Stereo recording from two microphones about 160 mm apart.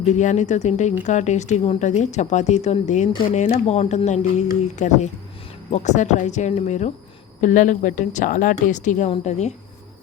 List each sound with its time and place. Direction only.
0.0 s speech: 50° left (ahead or behind)